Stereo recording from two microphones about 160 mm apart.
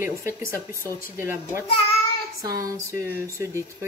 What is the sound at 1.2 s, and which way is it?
Speech, 15° right (ahead or behind).